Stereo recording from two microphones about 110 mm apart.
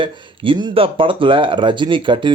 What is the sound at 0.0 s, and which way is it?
Speech, 50° right (ahead or behind).